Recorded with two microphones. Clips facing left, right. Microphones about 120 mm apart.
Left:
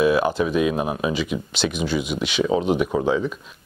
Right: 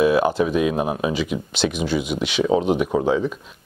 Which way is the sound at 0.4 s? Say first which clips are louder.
Right 1 dB; 45° right (ahead or behind).